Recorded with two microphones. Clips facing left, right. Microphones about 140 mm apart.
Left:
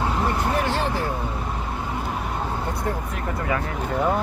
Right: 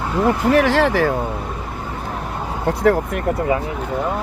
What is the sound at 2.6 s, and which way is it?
Speech, 85° right.